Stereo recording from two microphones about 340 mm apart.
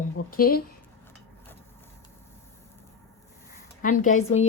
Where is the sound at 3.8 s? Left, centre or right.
Left.